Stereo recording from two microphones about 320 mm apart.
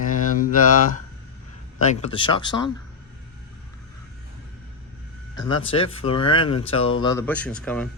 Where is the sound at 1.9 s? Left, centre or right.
Centre.